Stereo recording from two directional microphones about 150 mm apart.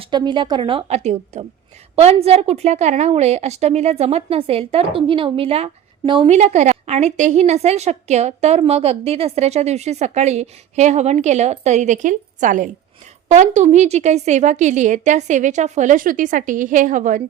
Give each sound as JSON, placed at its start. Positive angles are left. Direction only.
{"t": 0.0, "sound": "a woman's voice", "side_deg": -30}
{"t": 6.3, "sound": "a woman's voice", "side_deg": -50}